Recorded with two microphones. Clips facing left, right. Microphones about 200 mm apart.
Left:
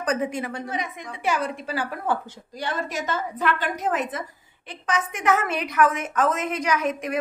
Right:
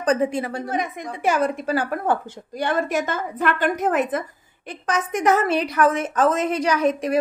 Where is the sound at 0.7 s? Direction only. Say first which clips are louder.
Right 5 dB; 50° right (ahead or behind).